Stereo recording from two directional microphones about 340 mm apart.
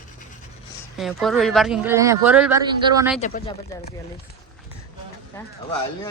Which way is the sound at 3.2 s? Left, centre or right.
Left.